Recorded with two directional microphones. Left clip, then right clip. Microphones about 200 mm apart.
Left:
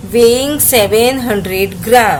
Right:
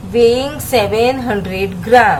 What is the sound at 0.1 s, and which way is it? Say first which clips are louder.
A woman's voice: left 2 dB; 35° left (ahead or behind).